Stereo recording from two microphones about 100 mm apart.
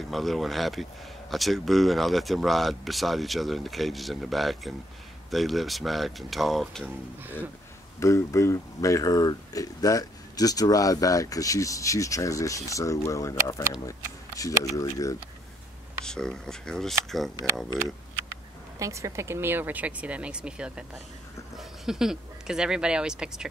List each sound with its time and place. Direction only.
0.0 s speech: centre (ahead or behind)
8.0 s speech: 30° left (ahead or behind)
16.1 s speech: 5° left (ahead or behind)
18.8 s speech: 30° right (ahead or behind); by 23.4 s 10° right (ahead or behind)